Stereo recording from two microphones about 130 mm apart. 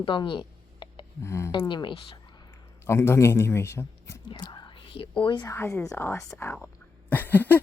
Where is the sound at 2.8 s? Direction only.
20° left (ahead or behind).